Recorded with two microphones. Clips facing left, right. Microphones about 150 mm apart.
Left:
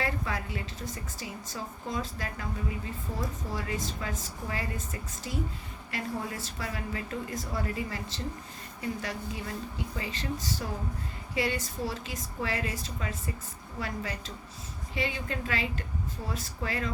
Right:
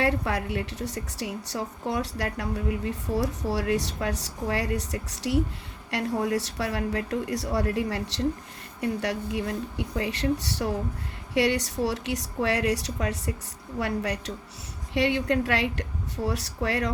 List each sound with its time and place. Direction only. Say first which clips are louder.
0.0 s a woman's voice: right 7 dB; 70° right (ahead or behind)